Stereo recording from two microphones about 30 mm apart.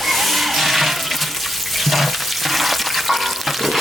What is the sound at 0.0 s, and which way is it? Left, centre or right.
Water, centre.